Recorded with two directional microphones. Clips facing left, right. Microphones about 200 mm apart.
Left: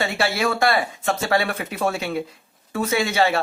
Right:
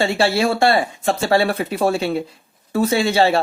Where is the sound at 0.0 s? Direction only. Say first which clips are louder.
Right 5 dB; 30° right (ahead or behind).